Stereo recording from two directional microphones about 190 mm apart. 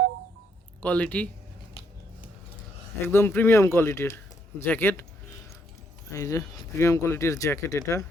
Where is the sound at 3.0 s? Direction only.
10° left (ahead or behind).